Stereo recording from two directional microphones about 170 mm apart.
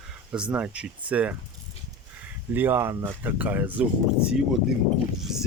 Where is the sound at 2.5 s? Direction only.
10° right (ahead or behind).